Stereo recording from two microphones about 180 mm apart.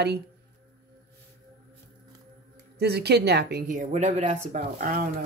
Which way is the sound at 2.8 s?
65° right (ahead or behind).